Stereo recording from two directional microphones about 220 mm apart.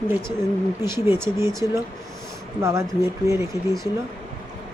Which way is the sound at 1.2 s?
10° right (ahead or behind).